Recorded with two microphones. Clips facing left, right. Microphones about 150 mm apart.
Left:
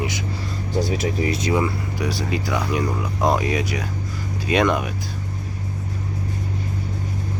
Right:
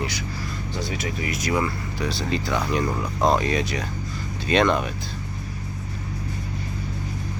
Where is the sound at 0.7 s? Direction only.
35° left (ahead or behind).